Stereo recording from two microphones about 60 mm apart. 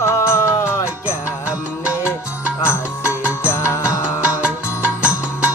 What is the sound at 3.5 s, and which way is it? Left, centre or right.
Music, left.